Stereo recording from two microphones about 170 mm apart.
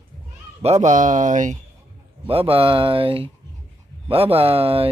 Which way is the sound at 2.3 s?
35° right (ahead or behind).